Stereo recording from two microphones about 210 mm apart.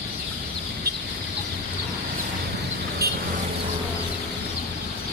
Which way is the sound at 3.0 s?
50° right (ahead or behind).